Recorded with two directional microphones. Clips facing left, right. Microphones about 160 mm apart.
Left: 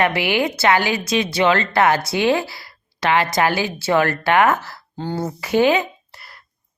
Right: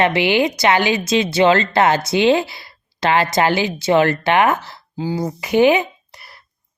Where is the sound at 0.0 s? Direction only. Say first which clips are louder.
Right 3 dB; 25° right (ahead or behind).